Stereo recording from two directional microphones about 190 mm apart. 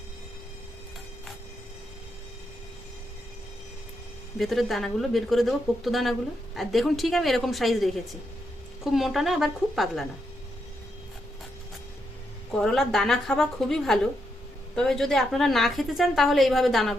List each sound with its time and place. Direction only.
4.4 s a woman's voice: centre (ahead or behind)
12.5 s a woman's voice: centre (ahead or behind)